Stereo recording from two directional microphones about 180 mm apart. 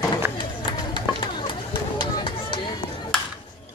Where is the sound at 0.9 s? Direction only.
25° left (ahead or behind).